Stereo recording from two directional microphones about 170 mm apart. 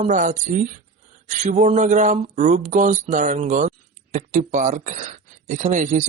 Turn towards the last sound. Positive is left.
turn(degrees=-45)  # may be behind; listen again after turning